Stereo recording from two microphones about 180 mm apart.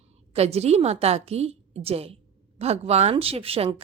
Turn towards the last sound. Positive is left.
turn(degrees=-35)  # may be behind; listen again after turning